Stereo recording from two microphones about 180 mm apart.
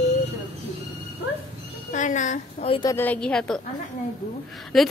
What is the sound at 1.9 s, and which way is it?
Speech, 45° left (ahead or behind).